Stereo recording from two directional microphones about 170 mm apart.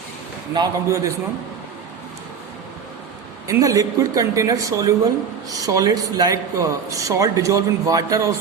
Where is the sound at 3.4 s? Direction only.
20° right (ahead or behind).